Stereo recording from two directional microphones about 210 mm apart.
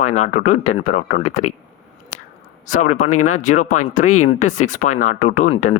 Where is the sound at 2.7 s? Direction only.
35° left (ahead or behind).